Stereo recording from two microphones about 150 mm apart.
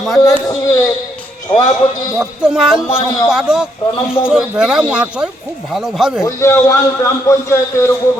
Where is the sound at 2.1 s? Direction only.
5° right (ahead or behind).